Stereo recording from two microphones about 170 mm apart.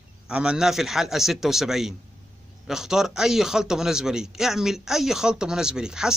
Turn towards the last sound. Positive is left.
turn(degrees=-5)  # may be behind; listen again after turning